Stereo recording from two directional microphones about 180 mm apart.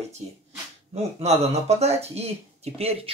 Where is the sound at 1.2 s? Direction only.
35° right (ahead or behind).